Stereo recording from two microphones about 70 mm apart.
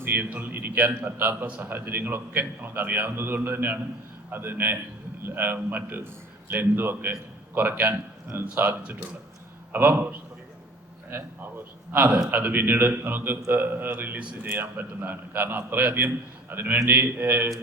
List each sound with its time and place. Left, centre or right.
0.0 s a man's voice: right
9.7 s a man's voice: right
11.9 s a man's voice: right